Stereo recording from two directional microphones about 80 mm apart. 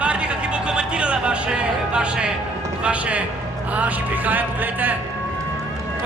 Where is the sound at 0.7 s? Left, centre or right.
Centre.